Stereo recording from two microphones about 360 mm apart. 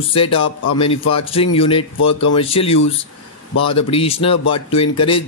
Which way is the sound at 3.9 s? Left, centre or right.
Centre.